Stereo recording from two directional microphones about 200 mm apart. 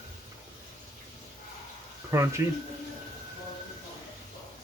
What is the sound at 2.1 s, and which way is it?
Speech, 15° right (ahead or behind).